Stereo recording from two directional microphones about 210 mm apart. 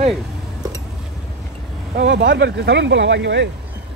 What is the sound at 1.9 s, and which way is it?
Speech, 55° right (ahead or behind).